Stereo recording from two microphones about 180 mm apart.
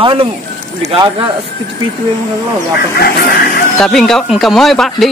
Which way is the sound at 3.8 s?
Centre (ahead or behind).